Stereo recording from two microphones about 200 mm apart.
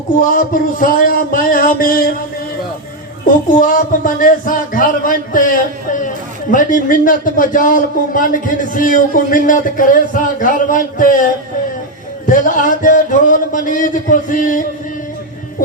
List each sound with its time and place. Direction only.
0.2 s speech: 40° left (ahead or behind)
3.2 s speech: 40° left (ahead or behind)